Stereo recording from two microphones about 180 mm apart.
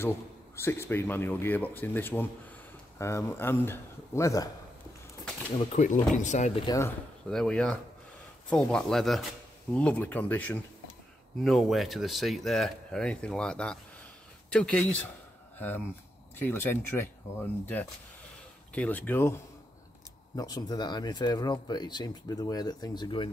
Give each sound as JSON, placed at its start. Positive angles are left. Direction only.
{"t": 0.6, "sound": "speech", "side_deg": 15}
{"t": 5.7, "sound": "speech", "side_deg": 40}
{"t": 6.6, "sound": "speech", "side_deg": 20}
{"t": 7.2, "sound": "speech", "side_deg": 5}
{"t": 18.7, "sound": "speech", "side_deg": 10}